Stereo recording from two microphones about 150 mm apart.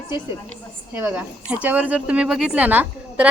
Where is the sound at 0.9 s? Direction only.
10° right (ahead or behind).